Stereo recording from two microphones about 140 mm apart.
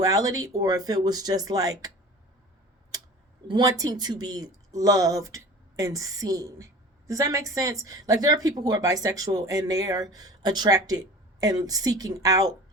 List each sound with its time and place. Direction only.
0.0 s speech: 25° right (ahead or behind)
3.4 s speech: 30° right (ahead or behind)